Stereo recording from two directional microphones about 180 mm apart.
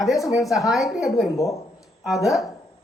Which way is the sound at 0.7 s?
Centre (ahead or behind).